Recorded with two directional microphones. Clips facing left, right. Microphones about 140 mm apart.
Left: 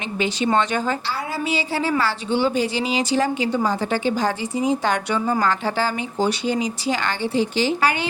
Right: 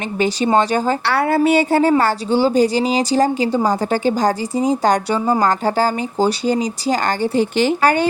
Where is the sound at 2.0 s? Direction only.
35° right (ahead or behind).